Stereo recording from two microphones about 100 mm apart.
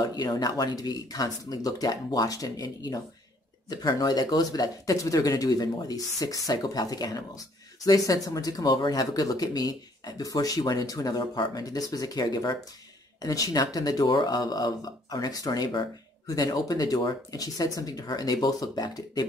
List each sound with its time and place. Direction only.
0.0 s speech: 40° left (ahead or behind)